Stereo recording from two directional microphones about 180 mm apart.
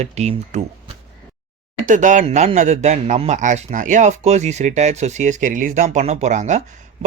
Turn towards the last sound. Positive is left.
turn(degrees=-40)  # may be behind; listen again after turning